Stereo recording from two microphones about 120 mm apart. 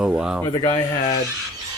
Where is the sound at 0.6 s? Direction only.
25° left (ahead or behind).